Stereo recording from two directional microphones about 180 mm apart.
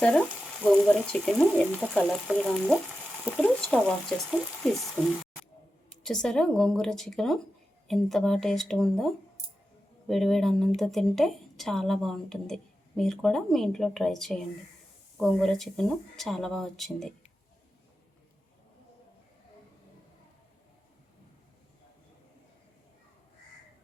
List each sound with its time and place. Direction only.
0.0 s frying: 5° left (ahead or behind)